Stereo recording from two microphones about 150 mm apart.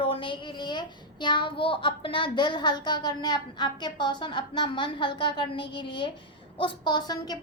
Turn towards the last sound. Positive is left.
turn(degrees=25)  # may be behind; listen again after turning